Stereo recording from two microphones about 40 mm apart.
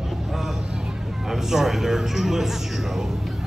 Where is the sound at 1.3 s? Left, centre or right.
Centre.